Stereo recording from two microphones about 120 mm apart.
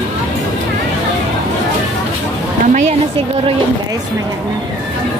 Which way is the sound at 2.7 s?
80° right.